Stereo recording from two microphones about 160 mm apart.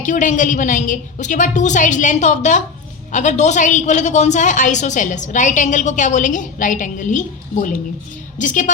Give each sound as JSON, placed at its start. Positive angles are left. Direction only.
{"t": 0.0, "sound": "a woman's voice", "side_deg": 50}